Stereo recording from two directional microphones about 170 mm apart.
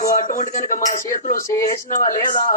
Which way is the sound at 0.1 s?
50° left (ahead or behind).